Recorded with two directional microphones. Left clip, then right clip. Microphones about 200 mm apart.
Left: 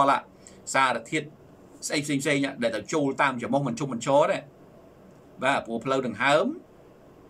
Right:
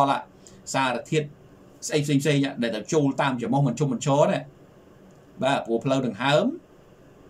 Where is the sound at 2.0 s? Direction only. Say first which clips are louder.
Right 2 dB; 15° right (ahead or behind).